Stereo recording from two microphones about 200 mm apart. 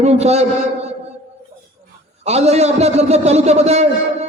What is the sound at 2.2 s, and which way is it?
A man's voice, 30° right (ahead or behind).